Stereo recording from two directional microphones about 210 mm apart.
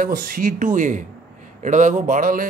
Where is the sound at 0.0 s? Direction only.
40° right (ahead or behind).